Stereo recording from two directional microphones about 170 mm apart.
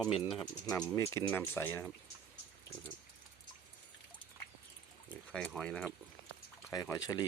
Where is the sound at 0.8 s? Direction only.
15° left (ahead or behind).